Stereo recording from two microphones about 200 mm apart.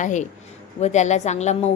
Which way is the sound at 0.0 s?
35° left (ahead or behind).